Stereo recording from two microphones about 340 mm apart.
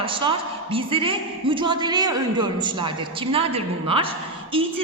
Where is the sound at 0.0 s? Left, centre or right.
Centre.